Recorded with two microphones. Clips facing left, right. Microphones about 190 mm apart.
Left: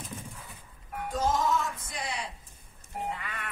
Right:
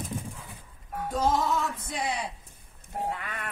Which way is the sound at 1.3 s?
60° right (ahead or behind).